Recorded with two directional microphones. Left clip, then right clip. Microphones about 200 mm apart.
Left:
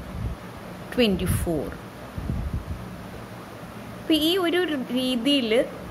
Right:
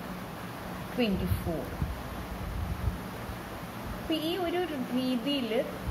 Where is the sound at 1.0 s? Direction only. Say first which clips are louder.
Left 9 dB; 45° left (ahead or behind).